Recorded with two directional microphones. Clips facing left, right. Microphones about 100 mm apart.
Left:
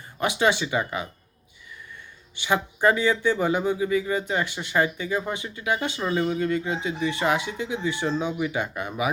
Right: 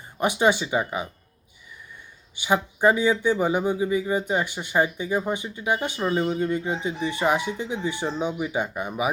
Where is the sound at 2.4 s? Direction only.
15° right (ahead or behind).